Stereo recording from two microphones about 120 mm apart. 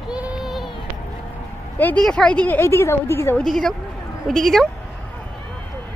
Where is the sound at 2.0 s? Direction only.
5° left (ahead or behind).